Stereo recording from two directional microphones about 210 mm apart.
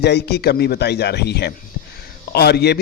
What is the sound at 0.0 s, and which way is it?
A man's voice, 50° left (ahead or behind).